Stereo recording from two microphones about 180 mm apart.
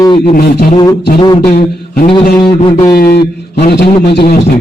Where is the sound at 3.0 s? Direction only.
55° left (ahead or behind).